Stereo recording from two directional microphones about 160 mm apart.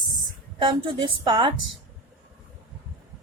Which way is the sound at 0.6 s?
30° right (ahead or behind).